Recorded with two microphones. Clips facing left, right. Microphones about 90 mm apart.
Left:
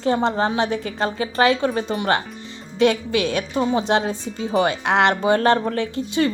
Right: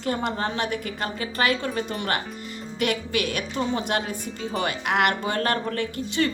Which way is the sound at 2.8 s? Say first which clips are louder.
Left 7 dB; 25° left (ahead or behind).